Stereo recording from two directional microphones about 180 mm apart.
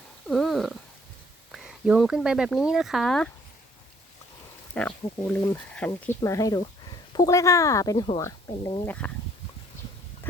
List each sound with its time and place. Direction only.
0.3 s cat: centre (ahead or behind)
1.5 s speech: 5° right (ahead or behind)
4.7 s speech: 5° left (ahead or behind)